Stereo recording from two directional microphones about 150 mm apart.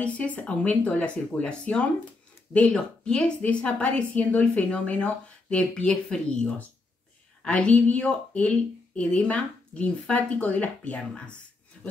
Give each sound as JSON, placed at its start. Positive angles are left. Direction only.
{"t": 0.0, "sound": "a woman's voice", "side_deg": 10}